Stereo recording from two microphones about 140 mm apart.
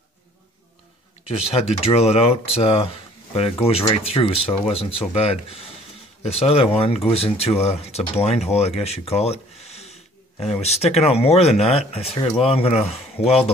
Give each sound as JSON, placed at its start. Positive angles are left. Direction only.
{"t": 1.5, "sound": "speech", "side_deg": 45}